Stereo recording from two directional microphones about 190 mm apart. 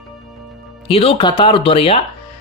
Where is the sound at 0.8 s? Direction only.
30° left (ahead or behind).